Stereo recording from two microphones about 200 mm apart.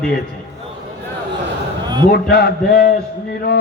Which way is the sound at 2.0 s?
50° left (ahead or behind).